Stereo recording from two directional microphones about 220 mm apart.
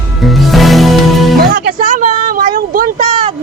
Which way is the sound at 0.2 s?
Centre (ahead or behind).